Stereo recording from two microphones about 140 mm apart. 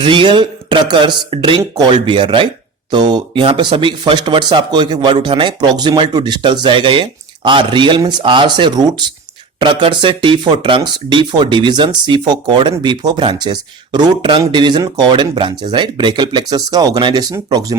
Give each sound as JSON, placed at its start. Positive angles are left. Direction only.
{"t": 0.0, "sound": "speech", "side_deg": -35}